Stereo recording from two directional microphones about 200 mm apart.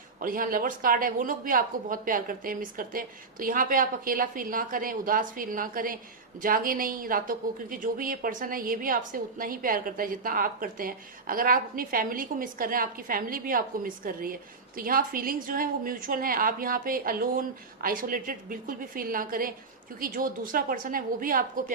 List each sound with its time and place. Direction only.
0.2 s a woman's voice: 45° right (ahead or behind)